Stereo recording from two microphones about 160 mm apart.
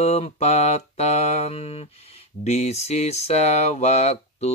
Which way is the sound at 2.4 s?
40° left (ahead or behind).